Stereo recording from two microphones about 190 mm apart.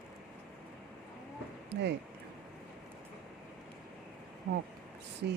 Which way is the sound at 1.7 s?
65° right (ahead or behind).